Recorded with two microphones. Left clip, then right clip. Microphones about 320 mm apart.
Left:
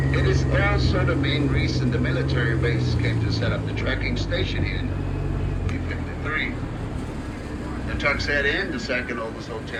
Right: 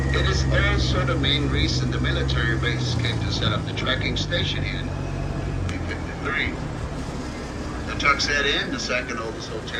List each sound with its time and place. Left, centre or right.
0.1 s speech: centre
6.2 s vehicle: centre
8.0 s speech: centre